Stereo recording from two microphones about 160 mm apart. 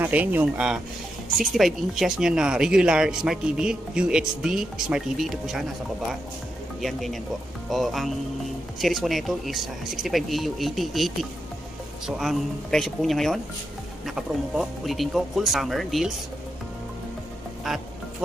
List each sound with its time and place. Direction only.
0.0 s speech: 10° right (ahead or behind)
6.8 s speech: centre (ahead or behind)
17.7 s speech: centre (ahead or behind)